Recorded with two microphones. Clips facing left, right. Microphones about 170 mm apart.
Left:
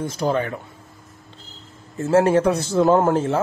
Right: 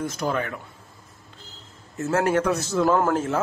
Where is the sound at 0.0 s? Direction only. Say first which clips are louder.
Left 4 dB; 30° left (ahead or behind).